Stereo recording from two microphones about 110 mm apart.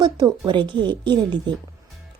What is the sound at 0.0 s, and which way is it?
A woman's voice, 40° right (ahead or behind).